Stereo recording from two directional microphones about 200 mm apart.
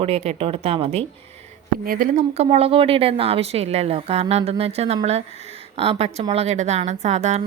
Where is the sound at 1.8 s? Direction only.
45° right (ahead or behind).